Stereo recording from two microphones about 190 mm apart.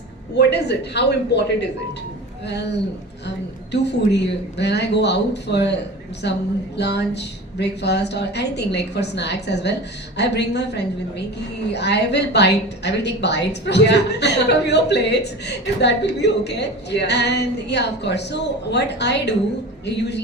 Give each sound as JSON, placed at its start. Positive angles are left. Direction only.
{"t": 0.3, "sound": "a woman's voice", "side_deg": 60}